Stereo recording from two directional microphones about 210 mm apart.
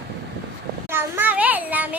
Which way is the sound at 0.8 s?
10° right (ahead or behind).